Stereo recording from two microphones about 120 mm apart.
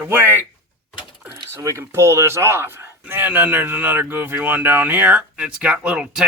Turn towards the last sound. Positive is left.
turn(degrees=-10)  # may be behind; listen again after turning